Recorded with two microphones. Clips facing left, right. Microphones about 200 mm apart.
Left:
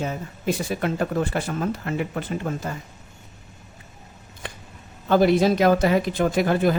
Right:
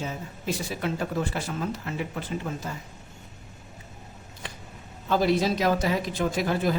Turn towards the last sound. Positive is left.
turn(degrees=60)  # may be behind; listen again after turning